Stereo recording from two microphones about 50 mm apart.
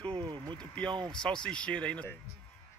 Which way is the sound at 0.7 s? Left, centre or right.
Centre.